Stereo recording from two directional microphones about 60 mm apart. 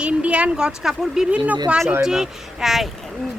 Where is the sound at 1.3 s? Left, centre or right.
Right.